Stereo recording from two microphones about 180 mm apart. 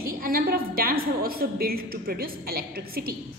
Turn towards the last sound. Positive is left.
turn(degrees=-55)  # may be behind; listen again after turning